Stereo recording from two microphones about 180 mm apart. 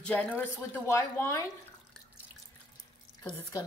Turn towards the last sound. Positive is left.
turn(degrees=20)  # may be behind; listen again after turning